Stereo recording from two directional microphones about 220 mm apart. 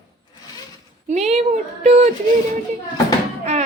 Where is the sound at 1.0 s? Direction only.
30° right (ahead or behind).